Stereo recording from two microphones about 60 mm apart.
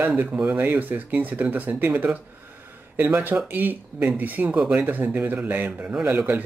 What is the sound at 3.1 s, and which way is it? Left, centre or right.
Speech, right.